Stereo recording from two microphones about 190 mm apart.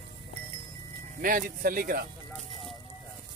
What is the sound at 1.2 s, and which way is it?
Speech, 45° right (ahead or behind).